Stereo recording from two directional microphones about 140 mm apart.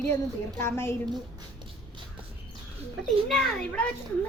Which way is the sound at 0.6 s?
15° left (ahead or behind).